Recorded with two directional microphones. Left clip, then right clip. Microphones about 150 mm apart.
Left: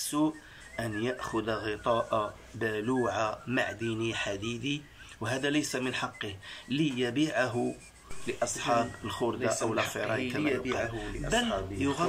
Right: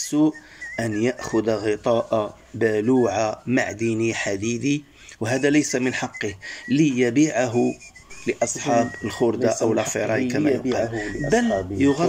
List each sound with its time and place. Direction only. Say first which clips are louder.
0.1 s speech: right 10 dB; 30° right (ahead or behind)